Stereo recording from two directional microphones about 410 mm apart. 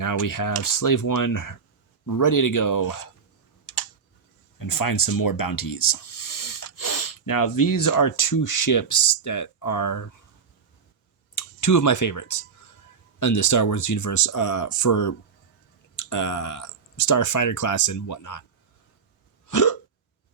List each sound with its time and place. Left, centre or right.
0.0 s speech: left
4.5 s speech: left
11.3 s speech: left
19.5 s hiccup: left